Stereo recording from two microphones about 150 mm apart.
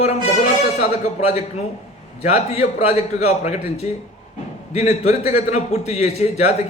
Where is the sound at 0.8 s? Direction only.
45° left (ahead or behind).